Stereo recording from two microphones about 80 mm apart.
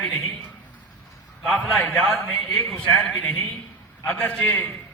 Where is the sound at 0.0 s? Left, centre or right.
Left.